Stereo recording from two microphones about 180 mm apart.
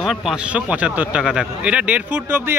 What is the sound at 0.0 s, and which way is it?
Speech, centre (ahead or behind).